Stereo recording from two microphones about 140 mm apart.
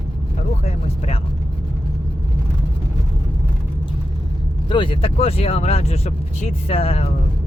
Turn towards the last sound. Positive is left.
turn(degrees=45)  # may be behind; listen again after turning